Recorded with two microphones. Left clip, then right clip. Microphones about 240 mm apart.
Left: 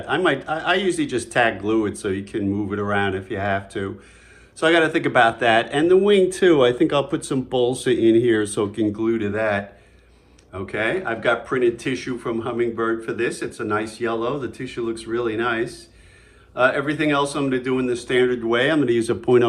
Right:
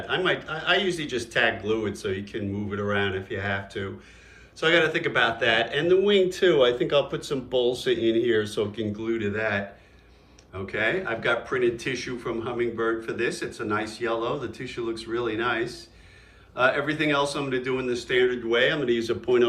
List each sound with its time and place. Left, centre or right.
0.0 s a man's voice: centre